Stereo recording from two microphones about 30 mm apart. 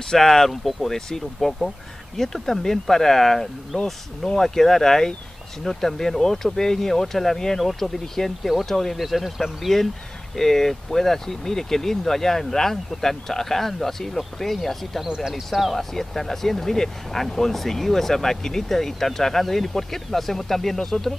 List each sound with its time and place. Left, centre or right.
0.1 s speech: centre
8.9 s speech: centre
10.3 s speech: centre
15.0 s speech: right
15.7 s speech: centre